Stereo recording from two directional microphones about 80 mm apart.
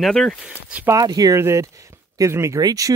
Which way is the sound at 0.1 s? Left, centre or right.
Centre.